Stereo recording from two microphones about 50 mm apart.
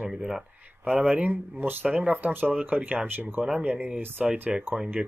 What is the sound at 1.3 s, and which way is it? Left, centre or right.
Speech, right.